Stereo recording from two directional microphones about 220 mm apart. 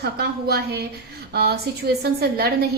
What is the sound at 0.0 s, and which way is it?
A woman's voice, 45° right (ahead or behind).